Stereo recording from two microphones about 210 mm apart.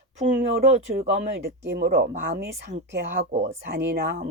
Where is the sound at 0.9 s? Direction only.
35° right (ahead or behind).